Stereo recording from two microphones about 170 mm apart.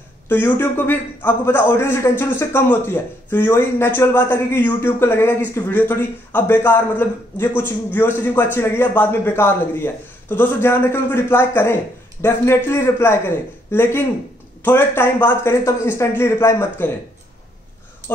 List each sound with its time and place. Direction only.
0.3 s a man's voice: 10° left (ahead or behind)